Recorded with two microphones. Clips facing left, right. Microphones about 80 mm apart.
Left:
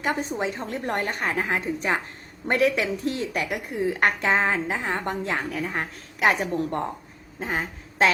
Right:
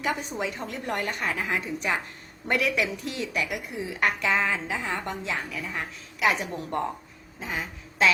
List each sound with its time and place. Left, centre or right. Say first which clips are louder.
0.0 s a woman's voice: left 3 dB; left
4.2 s a woman's voice: left 3 dB; left